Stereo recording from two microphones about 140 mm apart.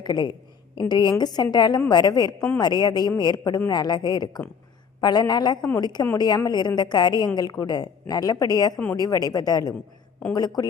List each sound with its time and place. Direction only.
0.0 s a woman's voice: 30° left (ahead or behind)